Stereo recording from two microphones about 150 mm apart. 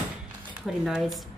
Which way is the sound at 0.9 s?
5° right (ahead or behind).